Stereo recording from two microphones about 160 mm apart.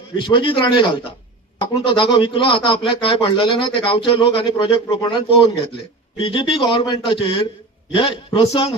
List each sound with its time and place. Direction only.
0.3 s a man's voice: 35° left (ahead or behind)